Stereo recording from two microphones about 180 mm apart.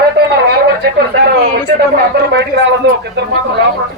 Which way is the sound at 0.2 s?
65° right (ahead or behind).